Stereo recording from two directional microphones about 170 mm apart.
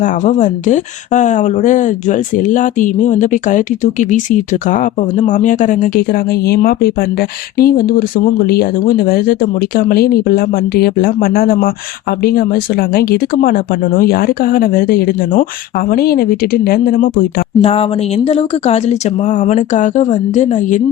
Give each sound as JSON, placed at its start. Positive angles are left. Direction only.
{"t": 0.0, "sound": "speech", "side_deg": 45}
{"t": 17.6, "sound": "speech", "side_deg": 35}